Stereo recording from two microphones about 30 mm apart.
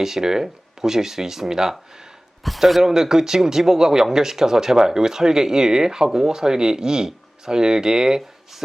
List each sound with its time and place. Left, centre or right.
0.0 s speech: centre
2.6 s speech: centre
2.8 s speech: centre